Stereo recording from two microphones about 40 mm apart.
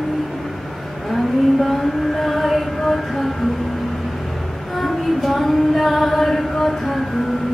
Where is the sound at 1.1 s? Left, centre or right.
Centre.